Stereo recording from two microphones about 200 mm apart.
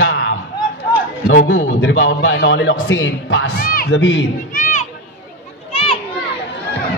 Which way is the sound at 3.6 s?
45° left (ahead or behind).